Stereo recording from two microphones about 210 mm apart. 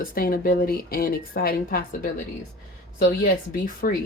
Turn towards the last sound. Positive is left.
turn(degrees=40)  # may be behind; listen again after turning